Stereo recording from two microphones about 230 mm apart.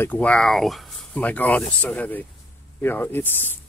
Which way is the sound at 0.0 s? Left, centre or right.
Centre.